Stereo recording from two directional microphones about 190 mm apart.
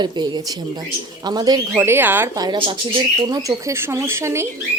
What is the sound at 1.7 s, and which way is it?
A woman's voice, 10° right (ahead or behind).